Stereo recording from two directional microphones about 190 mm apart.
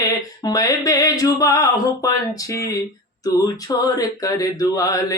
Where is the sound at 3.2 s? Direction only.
20° left (ahead or behind).